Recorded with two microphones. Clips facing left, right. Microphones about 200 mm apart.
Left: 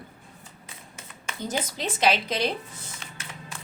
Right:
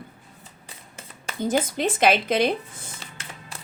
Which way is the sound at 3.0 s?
35° right (ahead or behind).